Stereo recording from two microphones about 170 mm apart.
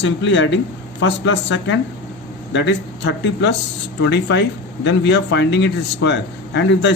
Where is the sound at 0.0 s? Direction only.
90° left.